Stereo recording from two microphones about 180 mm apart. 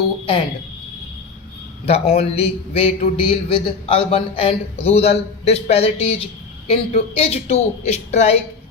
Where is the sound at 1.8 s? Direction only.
35° left (ahead or behind).